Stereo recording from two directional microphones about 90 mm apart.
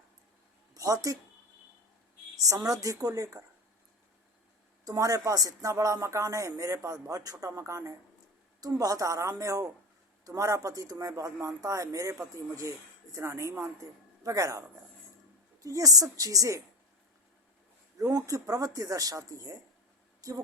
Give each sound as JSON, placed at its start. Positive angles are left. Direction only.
{"t": 0.7, "sound": "a sound", "side_deg": -40}
{"t": 2.4, "sound": "a man's voice", "side_deg": -40}
{"t": 4.9, "sound": "a man's voice", "side_deg": -40}
{"t": 15.6, "sound": "a man's voice", "side_deg": -40}
{"t": 17.9, "sound": "a man's voice", "side_deg": -40}